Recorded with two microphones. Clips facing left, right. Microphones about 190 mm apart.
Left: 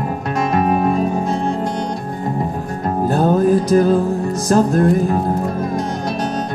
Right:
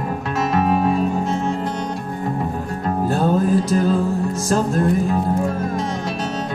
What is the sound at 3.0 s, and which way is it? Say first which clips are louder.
Music: left 4 dB; 40° left (ahead or behind).